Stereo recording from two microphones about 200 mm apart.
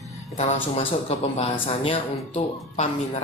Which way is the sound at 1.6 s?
30° left (ahead or behind).